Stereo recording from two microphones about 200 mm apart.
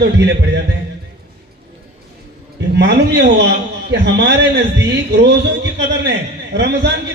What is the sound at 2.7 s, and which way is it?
A man's voice, 60° right (ahead or behind).